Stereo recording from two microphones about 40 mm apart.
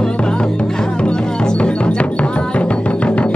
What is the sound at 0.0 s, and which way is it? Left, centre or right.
Music, left.